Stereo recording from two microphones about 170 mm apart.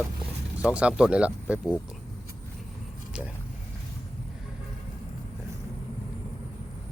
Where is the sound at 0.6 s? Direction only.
5° right (ahead or behind).